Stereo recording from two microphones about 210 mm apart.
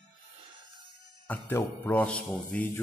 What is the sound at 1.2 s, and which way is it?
A man's voice, 10° left (ahead or behind).